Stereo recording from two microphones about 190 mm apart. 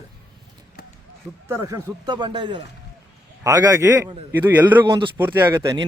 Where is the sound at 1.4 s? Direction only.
15° right (ahead or behind).